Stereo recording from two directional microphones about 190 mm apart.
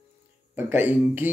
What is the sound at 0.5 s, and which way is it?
Speech, 10° right (ahead or behind).